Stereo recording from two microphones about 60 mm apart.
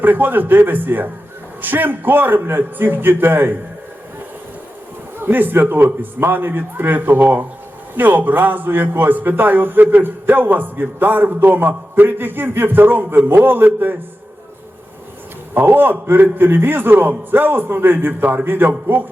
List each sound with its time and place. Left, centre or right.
0.0 s a man's voice: right
5.2 s a man's voice: right
15.5 s a man's voice: right